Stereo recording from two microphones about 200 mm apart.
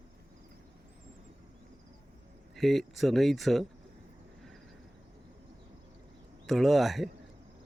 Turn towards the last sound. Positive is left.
turn(degrees=0)  # may be behind; listen again after turning